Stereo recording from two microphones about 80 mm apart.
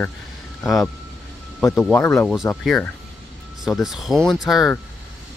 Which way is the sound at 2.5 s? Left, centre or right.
Left.